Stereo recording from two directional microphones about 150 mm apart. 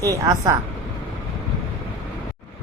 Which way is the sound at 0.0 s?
25° right (ahead or behind).